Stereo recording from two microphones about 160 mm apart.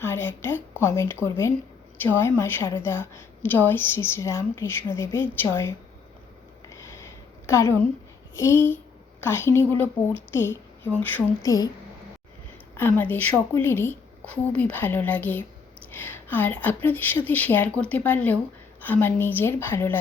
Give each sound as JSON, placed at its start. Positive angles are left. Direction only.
{"t": 0.0, "sound": "a woman's voice", "side_deg": 15}
{"t": 6.7, "sound": "a sound", "side_deg": 20}
{"t": 8.4, "sound": "a woman's voice", "side_deg": 15}
{"t": 13.0, "sound": "a woman's voice", "side_deg": 10}